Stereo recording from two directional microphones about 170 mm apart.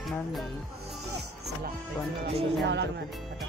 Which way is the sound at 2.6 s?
90° right.